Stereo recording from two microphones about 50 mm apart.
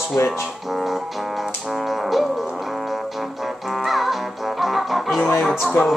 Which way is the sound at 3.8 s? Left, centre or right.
Centre.